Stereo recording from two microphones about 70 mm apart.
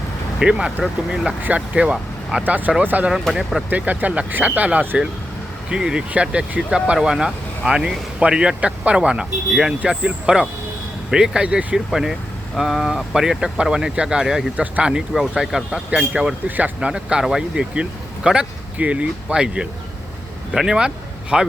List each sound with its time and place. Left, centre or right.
0.3 s speech: centre
2.4 s speech: right
3.2 s speech: centre
3.7 s speech: right
5.6 s speech: centre
11.9 s speech: centre
14.5 s speech: centre
15.1 s speech: centre
16.6 s speech: right
16.9 s speech: centre